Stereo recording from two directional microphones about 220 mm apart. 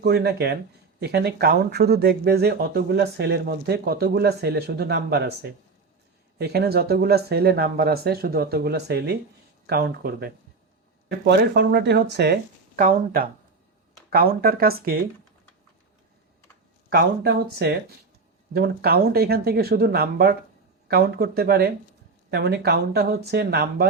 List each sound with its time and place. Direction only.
0.0 s speech: 50° right (ahead or behind)
16.9 s speech: 45° right (ahead or behind)